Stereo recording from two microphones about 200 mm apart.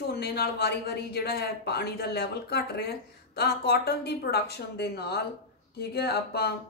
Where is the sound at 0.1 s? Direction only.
55° left (ahead or behind).